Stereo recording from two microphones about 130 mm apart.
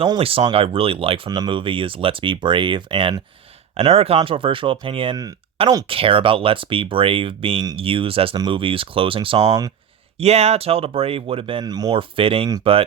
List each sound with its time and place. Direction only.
0.0 s speech: 45° right (ahead or behind)
3.8 s speech: 50° right (ahead or behind)
9.4 s speech: 25° right (ahead or behind)
10.2 s speech: 55° right (ahead or behind)
11.6 s speech: 30° right (ahead or behind)